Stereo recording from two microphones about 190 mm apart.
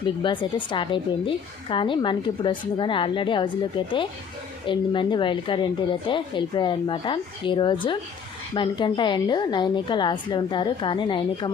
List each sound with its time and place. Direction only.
0.0 s a woman's voice: 25° left (ahead or behind)